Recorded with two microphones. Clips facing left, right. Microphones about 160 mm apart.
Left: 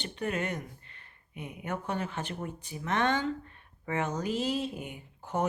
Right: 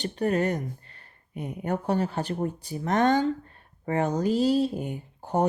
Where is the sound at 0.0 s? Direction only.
40° right (ahead or behind).